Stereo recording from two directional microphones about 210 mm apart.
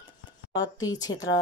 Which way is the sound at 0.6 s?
15° left (ahead or behind).